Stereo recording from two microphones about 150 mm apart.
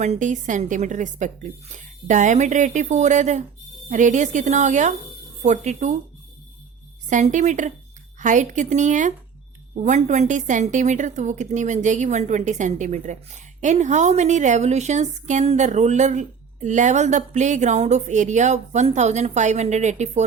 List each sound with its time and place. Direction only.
0.0 s a woman's voice: 55° right (ahead or behind)
7.1 s a woman's voice: 55° right (ahead or behind)